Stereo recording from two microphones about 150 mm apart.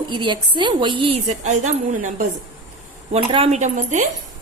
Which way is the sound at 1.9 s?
60° right (ahead or behind).